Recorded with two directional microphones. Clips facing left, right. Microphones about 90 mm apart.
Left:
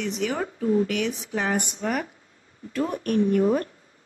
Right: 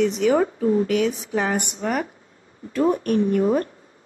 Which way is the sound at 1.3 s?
40° right (ahead or behind).